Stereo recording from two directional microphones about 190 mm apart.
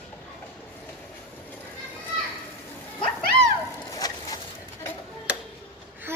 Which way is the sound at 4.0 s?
20° left (ahead or behind).